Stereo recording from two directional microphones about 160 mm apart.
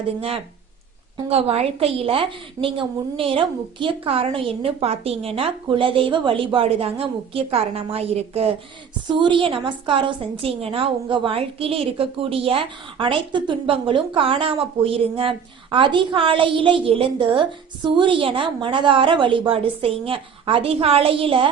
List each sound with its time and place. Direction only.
1.3 s a woman's voice: 40° right (ahead or behind)